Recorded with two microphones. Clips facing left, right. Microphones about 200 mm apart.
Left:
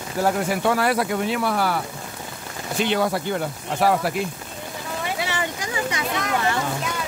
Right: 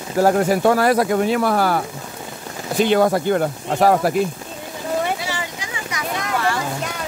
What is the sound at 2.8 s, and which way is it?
Speech, 45° right (ahead or behind).